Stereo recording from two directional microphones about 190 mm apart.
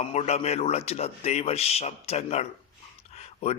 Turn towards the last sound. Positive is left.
turn(degrees=35)  # may be behind; listen again after turning